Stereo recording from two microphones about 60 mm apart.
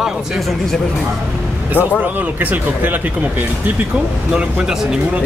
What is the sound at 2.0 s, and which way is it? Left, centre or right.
Speech, right.